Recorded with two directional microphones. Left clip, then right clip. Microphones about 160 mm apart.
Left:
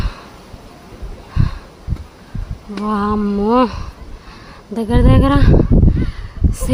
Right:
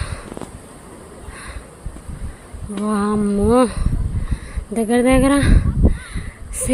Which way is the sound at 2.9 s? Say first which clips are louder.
Left 2 dB; 5° left (ahead or behind).